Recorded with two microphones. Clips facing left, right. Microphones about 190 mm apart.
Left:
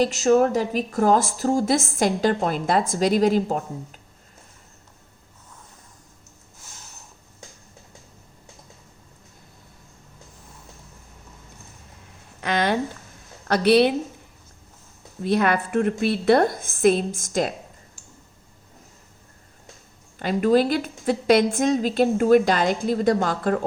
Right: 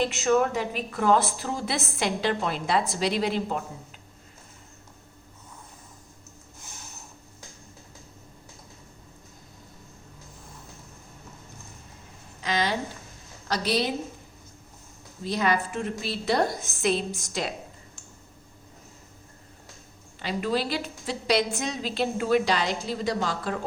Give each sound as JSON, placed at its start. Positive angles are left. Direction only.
{"t": 0.0, "sound": "a woman's voice", "side_deg": 40}
{"t": 12.4, "sound": "a sound", "side_deg": 55}
{"t": 13.5, "sound": "a woman's voice", "side_deg": 60}
{"t": 15.2, "sound": "a woman's voice", "side_deg": 60}
{"t": 20.1, "sound": "a woman's voice", "side_deg": 50}